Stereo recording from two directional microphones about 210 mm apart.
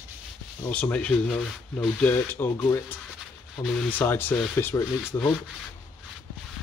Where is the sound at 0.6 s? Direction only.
5° left (ahead or behind).